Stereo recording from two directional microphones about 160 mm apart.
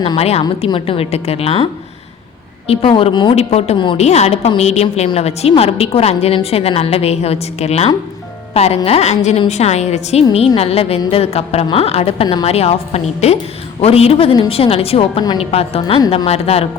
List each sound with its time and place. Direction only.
0.0 s a woman's voice: 40° left (ahead or behind)
2.6 s a woman's voice: 35° left (ahead or behind)
3.3 s a woman's voice: 40° left (ahead or behind)